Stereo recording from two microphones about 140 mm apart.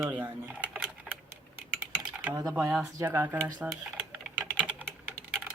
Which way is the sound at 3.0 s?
15° right (ahead or behind).